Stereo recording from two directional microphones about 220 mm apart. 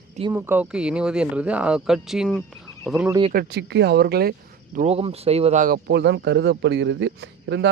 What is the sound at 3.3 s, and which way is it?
Speech, 45° right (ahead or behind).